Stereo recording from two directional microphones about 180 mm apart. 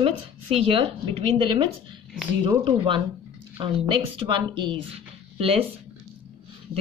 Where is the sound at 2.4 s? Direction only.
25° right (ahead or behind).